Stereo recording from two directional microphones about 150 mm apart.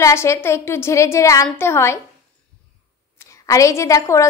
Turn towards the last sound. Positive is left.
turn(degrees=20)  # may be behind; listen again after turning